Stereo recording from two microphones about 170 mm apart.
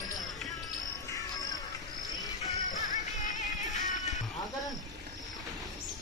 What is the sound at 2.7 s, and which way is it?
Music, 50° left (ahead or behind).